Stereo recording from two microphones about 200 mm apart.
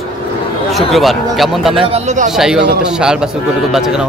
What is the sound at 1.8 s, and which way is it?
Speech, 35° right (ahead or behind).